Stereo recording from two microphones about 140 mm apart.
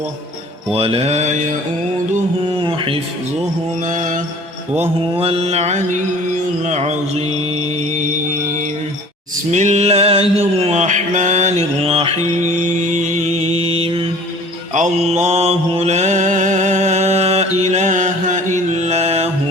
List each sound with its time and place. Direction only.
0.7 s music: 40° right (ahead or behind)
2.6 s a sound: 40° right (ahead or behind)
3.8 s mantra: 65° right (ahead or behind)
5.1 s music: 40° right (ahead or behind)
9.5 s mantra: 55° right (ahead or behind); by 14.1 s 40° right (ahead or behind)
14.7 s mantra: 55° right (ahead or behind)